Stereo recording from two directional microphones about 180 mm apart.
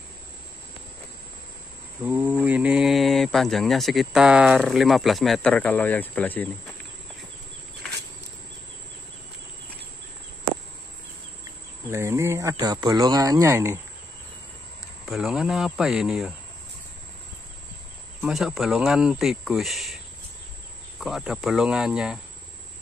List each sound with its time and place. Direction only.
2.0 s speech: 10° right (ahead or behind); by 6.5 s 10° left (ahead or behind)
11.9 s speech: 15° right (ahead or behind)
15.0 s speech: centre (ahead or behind)
18.2 s speech: centre (ahead or behind)
21.0 s speech: centre (ahead or behind)